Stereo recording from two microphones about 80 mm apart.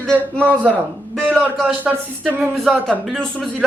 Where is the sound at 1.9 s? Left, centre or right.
Centre.